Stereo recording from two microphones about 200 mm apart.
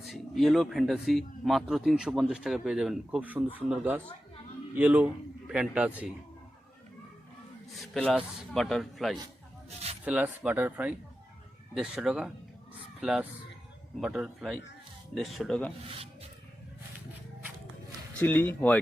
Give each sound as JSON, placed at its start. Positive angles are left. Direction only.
{"t": 0.0, "sound": "a man's voice", "side_deg": 0}
{"t": 7.7, "sound": "speech", "side_deg": 0}
{"t": 9.6, "sound": "a sound", "side_deg": -30}
{"t": 10.0, "sound": "speech", "side_deg": -10}
{"t": 18.2, "sound": "speech", "side_deg": 10}